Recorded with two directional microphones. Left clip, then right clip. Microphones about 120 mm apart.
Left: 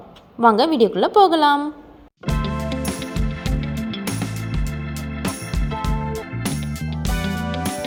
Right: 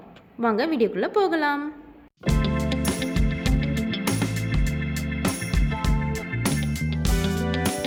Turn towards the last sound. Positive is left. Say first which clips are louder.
# left 1 dB
turn(degrees=0)  # may be behind; listen again after turning